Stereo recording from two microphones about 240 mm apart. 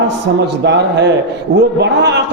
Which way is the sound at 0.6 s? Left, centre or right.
Right.